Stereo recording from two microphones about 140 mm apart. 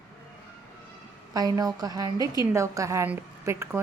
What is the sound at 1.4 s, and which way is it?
A woman's voice, 25° right (ahead or behind).